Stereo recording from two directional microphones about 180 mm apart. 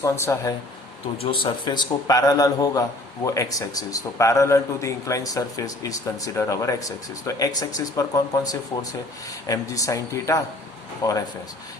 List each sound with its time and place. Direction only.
0.0 s speech: 15° left (ahead or behind)
1.2 s a man's voice: 30° left (ahead or behind)